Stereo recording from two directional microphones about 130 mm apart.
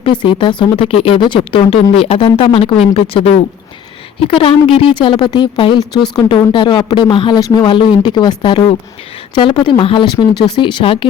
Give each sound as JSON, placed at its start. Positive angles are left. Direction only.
{"t": 0.0, "sound": "speech", "side_deg": 40}